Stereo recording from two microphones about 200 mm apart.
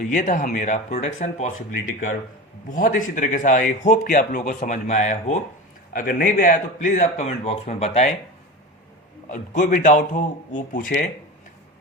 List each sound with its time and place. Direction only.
0.0 s speech: 40° left (ahead or behind)
2.6 s speech: 40° left (ahead or behind)
5.9 s speech: 45° left (ahead or behind)
9.3 s speech: 45° left (ahead or behind)